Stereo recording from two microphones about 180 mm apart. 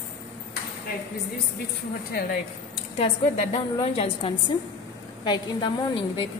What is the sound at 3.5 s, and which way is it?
A woman's voice, 30° left (ahead or behind).